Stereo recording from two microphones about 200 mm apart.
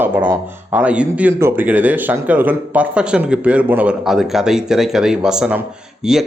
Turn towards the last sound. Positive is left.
turn(degrees=-5)  # may be behind; listen again after turning